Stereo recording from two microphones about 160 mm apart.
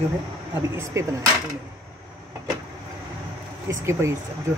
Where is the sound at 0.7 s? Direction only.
20° right (ahead or behind).